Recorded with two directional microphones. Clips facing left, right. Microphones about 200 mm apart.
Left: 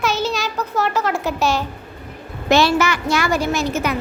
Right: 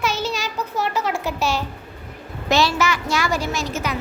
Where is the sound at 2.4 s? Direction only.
55° left (ahead or behind).